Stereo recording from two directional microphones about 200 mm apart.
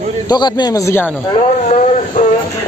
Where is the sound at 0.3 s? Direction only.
20° left (ahead or behind).